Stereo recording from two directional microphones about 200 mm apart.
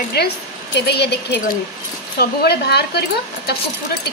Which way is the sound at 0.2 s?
55° left (ahead or behind).